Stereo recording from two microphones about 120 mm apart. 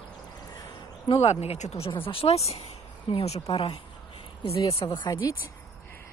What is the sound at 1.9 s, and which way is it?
Speech, 50° left (ahead or behind).